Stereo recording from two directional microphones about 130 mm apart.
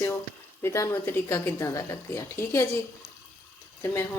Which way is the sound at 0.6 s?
20° left (ahead or behind).